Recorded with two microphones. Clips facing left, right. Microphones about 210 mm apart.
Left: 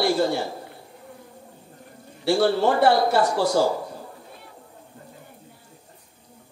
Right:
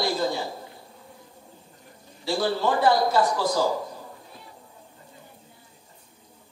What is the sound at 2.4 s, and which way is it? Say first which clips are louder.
A woman's voice: left 4 dB; 70° left (ahead or behind).